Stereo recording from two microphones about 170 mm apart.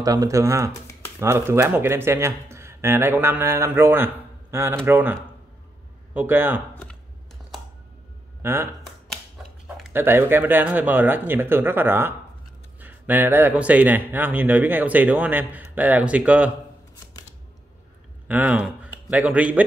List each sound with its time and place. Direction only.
0.0 s speech: 20° right (ahead or behind)
8.4 s speech: 15° right (ahead or behind)
9.9 s speech: 15° right (ahead or behind)
18.3 s speech: 10° right (ahead or behind)